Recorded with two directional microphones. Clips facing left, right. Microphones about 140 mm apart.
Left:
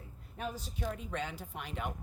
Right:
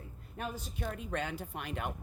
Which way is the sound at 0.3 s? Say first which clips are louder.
Even; 55° right (ahead or behind).